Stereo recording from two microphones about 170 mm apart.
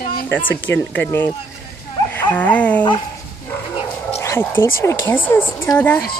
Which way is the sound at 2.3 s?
10° left (ahead or behind).